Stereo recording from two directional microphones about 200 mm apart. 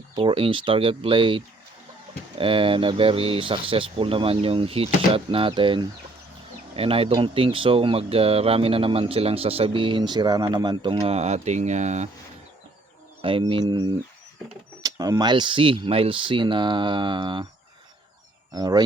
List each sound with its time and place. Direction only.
0.2 s speech: 25° right (ahead or behind)
13.2 s speech: 25° right (ahead or behind)
18.5 s speech: 20° right (ahead or behind)